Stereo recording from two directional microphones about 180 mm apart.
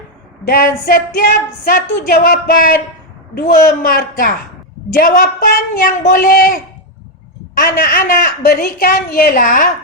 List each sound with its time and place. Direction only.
0.4 s a woman's voice: 55° left (ahead or behind)